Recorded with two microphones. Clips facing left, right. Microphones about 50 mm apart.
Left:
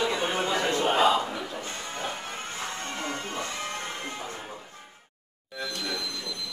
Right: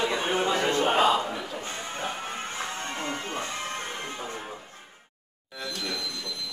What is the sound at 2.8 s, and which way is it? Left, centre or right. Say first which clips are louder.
Music: right 1 dB; right.